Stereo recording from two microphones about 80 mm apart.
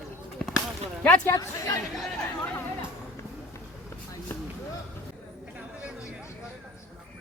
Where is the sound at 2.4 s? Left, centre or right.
Centre.